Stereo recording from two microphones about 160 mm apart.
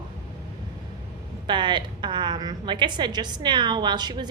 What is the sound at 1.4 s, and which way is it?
A woman's voice, 30° right (ahead or behind).